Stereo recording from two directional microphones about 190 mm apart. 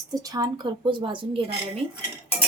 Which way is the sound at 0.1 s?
20° right (ahead or behind).